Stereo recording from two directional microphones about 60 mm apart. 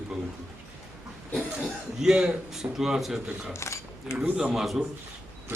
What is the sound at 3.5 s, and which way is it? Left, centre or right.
Camera, left.